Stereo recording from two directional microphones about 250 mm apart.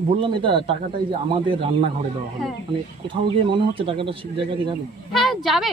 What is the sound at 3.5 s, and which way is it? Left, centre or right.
Speech, right.